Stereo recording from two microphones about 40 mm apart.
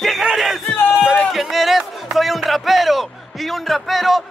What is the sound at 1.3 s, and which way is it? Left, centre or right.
A man's voice, centre.